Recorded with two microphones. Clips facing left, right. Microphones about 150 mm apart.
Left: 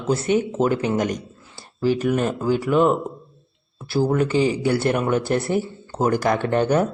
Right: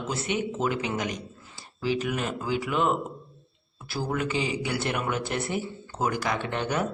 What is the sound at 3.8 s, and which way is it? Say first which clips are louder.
Speech: left 9 dB; 30° left (ahead or behind).